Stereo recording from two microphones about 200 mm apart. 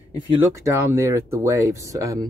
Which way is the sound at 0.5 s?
15° right (ahead or behind).